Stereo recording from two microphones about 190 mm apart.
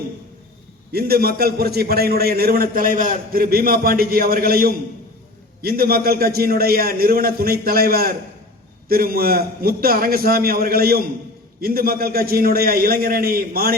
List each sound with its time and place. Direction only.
0.9 s a man's voice: 55° right (ahead or behind)